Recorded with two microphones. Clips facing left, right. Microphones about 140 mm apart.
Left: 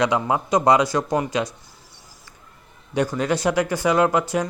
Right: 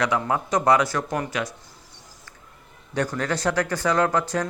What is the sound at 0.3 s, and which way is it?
Speech, 15° left (ahead or behind).